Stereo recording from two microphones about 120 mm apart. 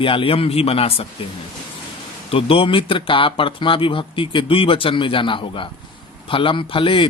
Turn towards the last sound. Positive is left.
turn(degrees=45)  # may be behind; listen again after turning